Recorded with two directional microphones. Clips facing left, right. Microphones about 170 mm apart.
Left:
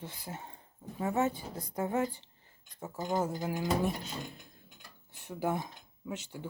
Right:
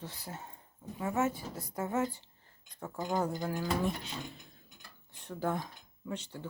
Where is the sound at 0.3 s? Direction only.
20° left (ahead or behind).